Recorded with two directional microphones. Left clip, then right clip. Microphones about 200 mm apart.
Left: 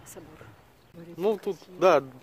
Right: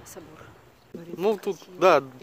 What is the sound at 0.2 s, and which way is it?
Speech, 30° right (ahead or behind).